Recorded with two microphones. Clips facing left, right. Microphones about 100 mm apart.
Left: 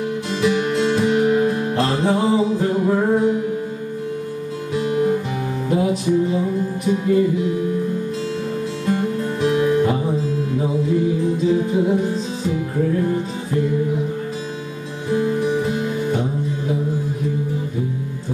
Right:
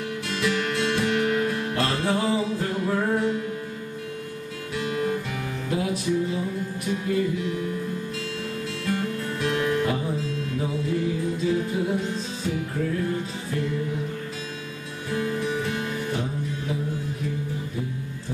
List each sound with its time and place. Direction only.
0.3 s music: 20° left (ahead or behind)
4.7 s music: 25° left (ahead or behind)
8.8 s music: 25° left (ahead or behind)
15.0 s music: 20° left (ahead or behind)